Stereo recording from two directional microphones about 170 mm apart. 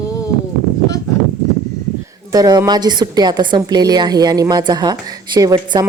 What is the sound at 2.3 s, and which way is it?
A woman's voice, 20° right (ahead or behind).